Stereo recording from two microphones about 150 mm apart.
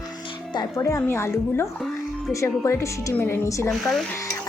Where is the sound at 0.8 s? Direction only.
20° left (ahead or behind).